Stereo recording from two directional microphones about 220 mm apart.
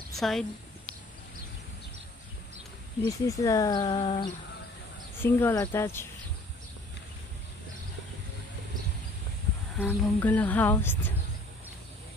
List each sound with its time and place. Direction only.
0.1 s speech: centre (ahead or behind)
3.1 s speech: 15° left (ahead or behind)
5.2 s speech: 10° left (ahead or behind)
9.8 s speech: 5° left (ahead or behind)